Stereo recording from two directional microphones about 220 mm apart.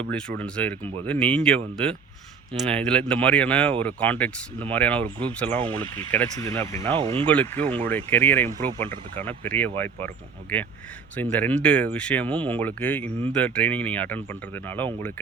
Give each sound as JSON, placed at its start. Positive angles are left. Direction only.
{"t": 0.1, "sound": "speech", "side_deg": 5}
{"t": 6.2, "sound": "speech", "side_deg": -25}
{"t": 6.6, "sound": "speech", "side_deg": 10}
{"t": 6.9, "sound": "speech", "side_deg": -25}
{"t": 7.3, "sound": "speech", "side_deg": 5}